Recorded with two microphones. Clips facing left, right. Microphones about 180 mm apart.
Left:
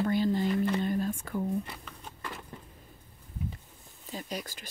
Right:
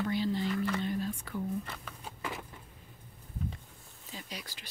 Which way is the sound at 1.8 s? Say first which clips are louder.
Right 2 dB; 10° right (ahead or behind).